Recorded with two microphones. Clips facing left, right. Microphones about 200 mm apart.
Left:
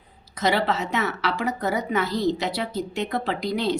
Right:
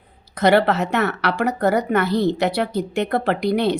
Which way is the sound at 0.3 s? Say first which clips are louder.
Right 7 dB; 60° right (ahead or behind).